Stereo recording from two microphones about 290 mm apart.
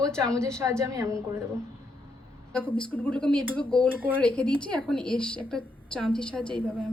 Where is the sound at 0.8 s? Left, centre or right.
Centre.